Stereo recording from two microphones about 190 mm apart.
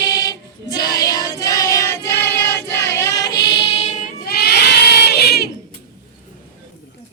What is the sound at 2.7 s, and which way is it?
Child singing, 15° left (ahead or behind).